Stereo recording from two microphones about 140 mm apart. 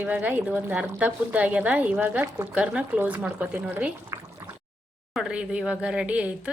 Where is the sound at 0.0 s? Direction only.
10° right (ahead or behind).